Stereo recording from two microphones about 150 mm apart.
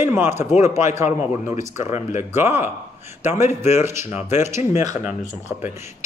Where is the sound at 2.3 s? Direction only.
15° right (ahead or behind).